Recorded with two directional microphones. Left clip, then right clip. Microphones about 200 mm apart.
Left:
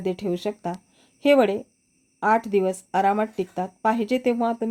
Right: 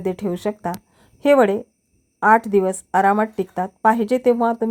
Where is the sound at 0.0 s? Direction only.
20° right (ahead or behind).